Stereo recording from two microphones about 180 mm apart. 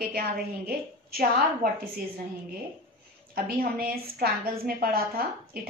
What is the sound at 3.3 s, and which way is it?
A woman's voice, 55° right (ahead or behind).